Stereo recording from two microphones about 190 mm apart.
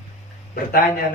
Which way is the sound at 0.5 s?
50° left (ahead or behind).